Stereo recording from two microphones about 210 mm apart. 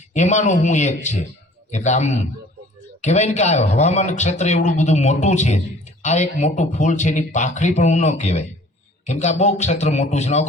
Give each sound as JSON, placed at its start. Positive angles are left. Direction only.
{"t": 0.1, "sound": "a man's voice", "side_deg": 35}